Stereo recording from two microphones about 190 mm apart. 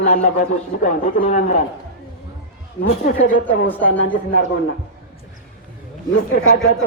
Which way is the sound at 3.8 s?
45° left (ahead or behind).